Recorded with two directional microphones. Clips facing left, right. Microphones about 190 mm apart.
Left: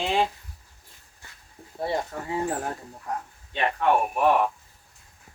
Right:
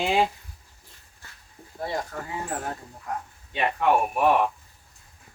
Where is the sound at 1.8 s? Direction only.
25° left (ahead or behind).